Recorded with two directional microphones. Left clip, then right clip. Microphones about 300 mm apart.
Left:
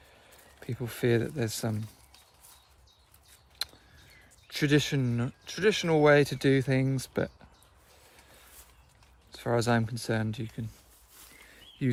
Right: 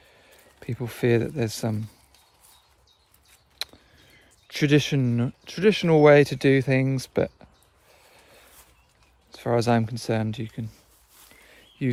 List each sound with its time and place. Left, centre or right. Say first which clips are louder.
0.6 s speech: right 5 dB; right
4.4 s speech: right 5 dB; right
9.3 s speech: right 5 dB; right
11.8 s speech: right 4 dB; right